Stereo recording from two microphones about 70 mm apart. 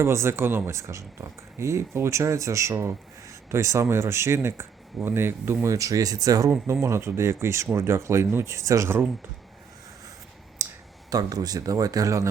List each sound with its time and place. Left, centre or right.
0.0 s speech: right
5.6 s speech: right
6.8 s speech: right
10.6 s clicking: right
11.1 s speech: right